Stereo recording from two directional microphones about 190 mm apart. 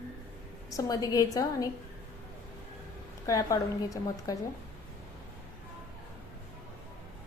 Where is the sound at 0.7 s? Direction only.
20° left (ahead or behind).